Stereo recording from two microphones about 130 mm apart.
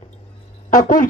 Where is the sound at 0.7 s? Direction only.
80° left.